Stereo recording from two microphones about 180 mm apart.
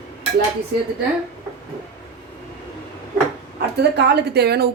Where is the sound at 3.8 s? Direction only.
65° right (ahead or behind).